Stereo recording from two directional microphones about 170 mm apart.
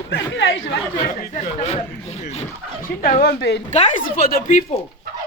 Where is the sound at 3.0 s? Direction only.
60° left (ahead or behind); by 3.6 s 80° left.